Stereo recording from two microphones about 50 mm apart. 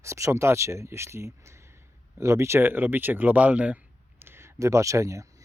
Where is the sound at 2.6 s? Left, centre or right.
Right.